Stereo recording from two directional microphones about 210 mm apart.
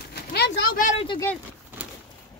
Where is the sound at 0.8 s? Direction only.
35° left (ahead or behind).